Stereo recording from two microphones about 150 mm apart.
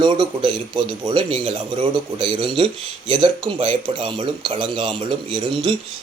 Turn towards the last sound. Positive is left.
turn(degrees=-35)  # may be behind; listen again after turning